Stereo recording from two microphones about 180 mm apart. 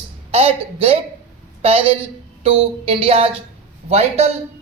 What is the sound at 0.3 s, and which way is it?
A man's voice, 35° right (ahead or behind).